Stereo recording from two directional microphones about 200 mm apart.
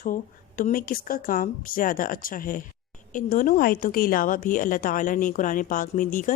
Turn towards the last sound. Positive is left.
turn(degrees=40)  # may be behind; listen again after turning